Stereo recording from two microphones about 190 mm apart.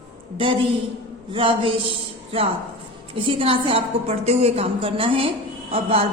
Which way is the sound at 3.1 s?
30° right (ahead or behind).